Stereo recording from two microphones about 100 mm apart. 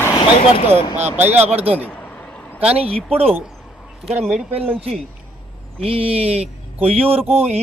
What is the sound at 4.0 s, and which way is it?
Speech, 90° right.